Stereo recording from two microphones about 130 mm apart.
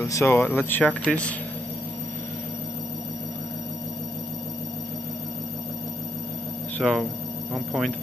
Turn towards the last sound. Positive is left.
turn(degrees=0)  # may be behind; listen again after turning